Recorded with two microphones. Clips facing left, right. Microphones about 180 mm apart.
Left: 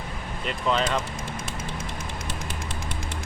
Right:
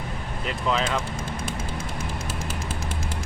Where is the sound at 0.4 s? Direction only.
Centre (ahead or behind).